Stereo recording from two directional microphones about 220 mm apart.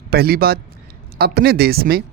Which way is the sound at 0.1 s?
45° right (ahead or behind).